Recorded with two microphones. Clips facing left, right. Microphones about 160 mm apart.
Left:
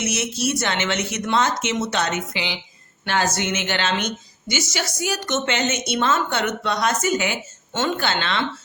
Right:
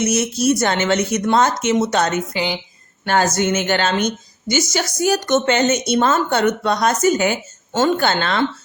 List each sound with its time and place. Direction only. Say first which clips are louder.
0.0 s a woman's voice: right 6 dB; 40° right (ahead or behind)